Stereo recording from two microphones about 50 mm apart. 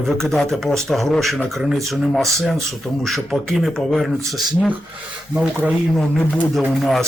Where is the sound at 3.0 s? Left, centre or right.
Centre.